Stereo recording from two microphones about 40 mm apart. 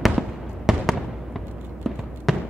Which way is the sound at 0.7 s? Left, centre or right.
Centre.